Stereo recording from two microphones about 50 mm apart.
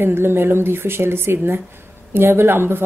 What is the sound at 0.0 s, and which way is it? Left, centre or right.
Speech, right.